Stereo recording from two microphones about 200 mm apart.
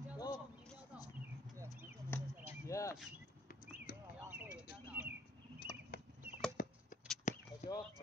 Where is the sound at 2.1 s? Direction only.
10° left (ahead or behind).